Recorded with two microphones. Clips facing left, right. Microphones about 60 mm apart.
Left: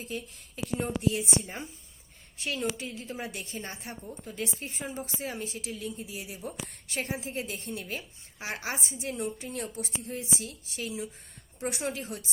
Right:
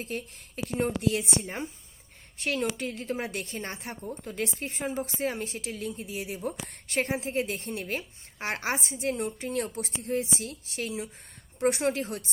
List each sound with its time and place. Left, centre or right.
0.0 s a woman's voice: right
4.9 s a woman's voice: right